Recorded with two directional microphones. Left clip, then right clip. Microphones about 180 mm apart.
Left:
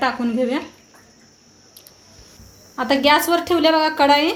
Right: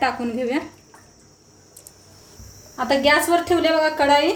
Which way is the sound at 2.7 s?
35° left (ahead or behind).